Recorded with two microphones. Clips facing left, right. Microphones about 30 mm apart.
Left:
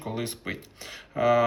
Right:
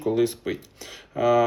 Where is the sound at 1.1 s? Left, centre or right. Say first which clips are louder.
Right 2 dB; left.